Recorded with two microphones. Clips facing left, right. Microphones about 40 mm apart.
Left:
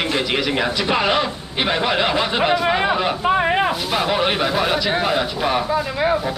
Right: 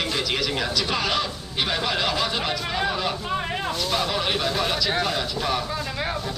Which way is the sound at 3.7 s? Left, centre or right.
Left.